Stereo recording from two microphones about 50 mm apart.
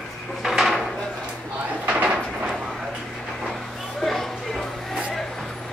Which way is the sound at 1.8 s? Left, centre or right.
Right.